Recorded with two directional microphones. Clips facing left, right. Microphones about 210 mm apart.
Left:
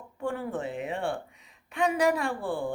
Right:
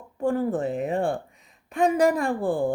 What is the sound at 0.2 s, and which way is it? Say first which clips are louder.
A woman's voice: right 8 dB; 40° right (ahead or behind).